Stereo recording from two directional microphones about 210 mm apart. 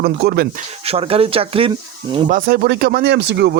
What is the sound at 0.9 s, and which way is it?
Speech, 25° right (ahead or behind).